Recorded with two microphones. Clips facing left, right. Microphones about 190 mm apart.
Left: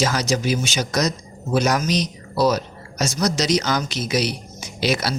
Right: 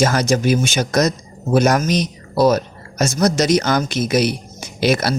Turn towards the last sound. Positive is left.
turn(degrees=-50)  # may be behind; listen again after turning